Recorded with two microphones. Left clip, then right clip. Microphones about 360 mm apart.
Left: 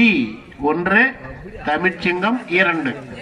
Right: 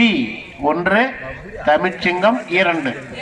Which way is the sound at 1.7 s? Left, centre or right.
Centre.